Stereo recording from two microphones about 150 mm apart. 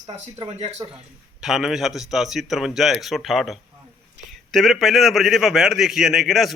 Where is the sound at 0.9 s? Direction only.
5° right (ahead or behind).